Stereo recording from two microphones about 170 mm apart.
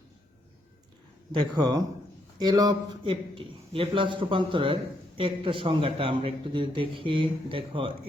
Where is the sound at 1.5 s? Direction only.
20° right (ahead or behind).